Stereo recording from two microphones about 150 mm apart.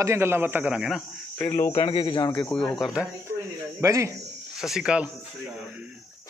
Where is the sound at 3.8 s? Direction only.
20° right (ahead or behind).